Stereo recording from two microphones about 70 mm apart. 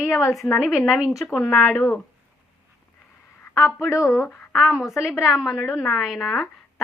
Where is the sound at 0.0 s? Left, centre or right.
Left.